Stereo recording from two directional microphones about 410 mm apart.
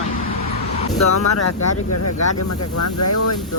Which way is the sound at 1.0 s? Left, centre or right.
Left.